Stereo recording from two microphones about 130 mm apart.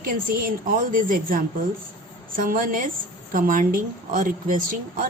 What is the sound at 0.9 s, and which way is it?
A woman's voice, 90° right.